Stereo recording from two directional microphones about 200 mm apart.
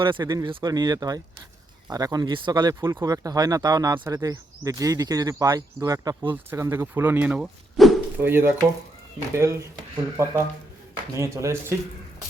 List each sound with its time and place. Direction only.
0.0 s speech: 20° right (ahead or behind)